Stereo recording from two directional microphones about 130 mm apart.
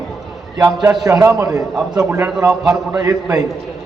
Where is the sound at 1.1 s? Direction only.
25° right (ahead or behind).